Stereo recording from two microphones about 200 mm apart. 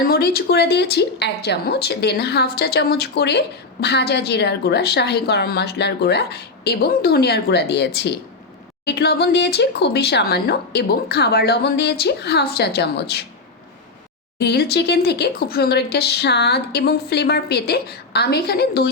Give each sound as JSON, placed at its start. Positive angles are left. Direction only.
{"t": 0.0, "sound": "a woman's voice", "side_deg": 50}
{"t": 14.3, "sound": "speech", "side_deg": 55}